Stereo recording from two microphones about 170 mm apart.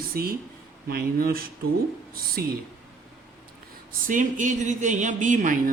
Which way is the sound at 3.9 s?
50° right (ahead or behind).